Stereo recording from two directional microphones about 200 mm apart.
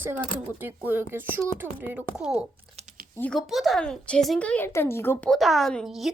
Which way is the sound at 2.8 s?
35° right (ahead or behind).